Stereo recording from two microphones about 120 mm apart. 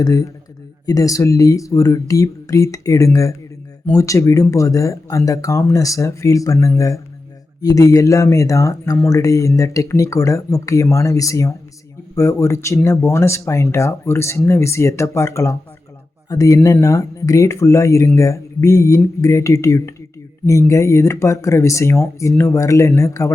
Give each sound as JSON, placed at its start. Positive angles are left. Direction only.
{"t": 0.0, "sound": "speech", "side_deg": 30}